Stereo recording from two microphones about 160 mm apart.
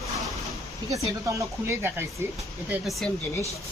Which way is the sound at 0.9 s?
20° right (ahead or behind).